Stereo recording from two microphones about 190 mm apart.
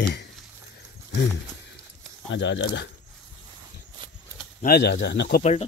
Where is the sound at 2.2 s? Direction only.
70° left (ahead or behind).